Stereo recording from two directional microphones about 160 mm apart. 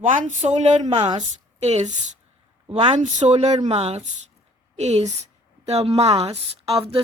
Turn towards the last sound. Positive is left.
turn(degrees=-35)  # may be behind; listen again after turning